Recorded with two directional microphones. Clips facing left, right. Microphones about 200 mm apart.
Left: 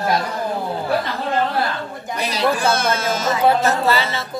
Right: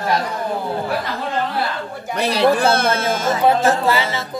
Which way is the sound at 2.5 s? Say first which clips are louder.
Right 2 dB; 55° right (ahead or behind).